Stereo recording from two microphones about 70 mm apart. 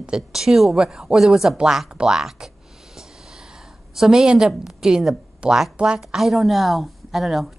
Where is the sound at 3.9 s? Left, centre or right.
Centre.